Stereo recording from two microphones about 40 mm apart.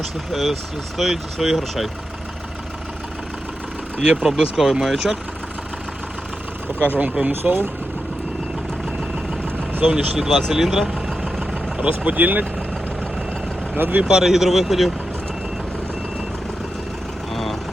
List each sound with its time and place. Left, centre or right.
0.0 s speech: centre
4.0 s speech: centre
6.7 s speech: right
9.0 s vehicle: centre
9.8 s speech: right
10.5 s speech: centre
11.8 s speech: right
13.7 s speech: right
14.0 s speech: centre
17.3 s vehicle: centre